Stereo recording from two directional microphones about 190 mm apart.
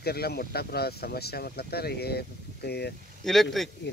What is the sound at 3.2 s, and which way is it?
Speech, centre (ahead or behind).